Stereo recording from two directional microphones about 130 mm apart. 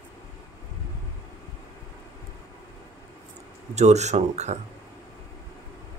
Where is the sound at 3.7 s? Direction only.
60° right (ahead or behind).